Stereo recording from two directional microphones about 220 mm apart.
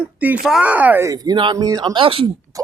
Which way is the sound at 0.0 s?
5° right (ahead or behind).